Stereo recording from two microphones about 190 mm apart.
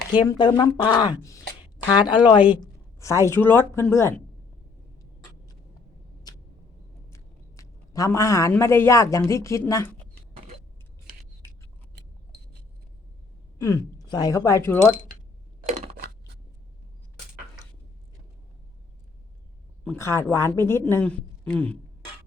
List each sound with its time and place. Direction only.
0.1 s speech: 25° left (ahead or behind)
7.1 s speech: 15° left (ahead or behind)
13.6 s speech: 15° left (ahead or behind)
15.7 s a sound: 35° right (ahead or behind)
19.8 s speech: 10° left (ahead or behind)